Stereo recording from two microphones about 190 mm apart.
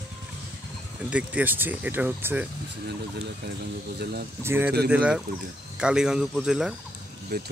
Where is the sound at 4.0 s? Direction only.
55° right (ahead or behind).